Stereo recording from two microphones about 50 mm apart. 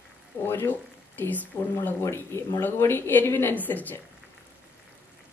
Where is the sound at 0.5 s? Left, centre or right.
Left.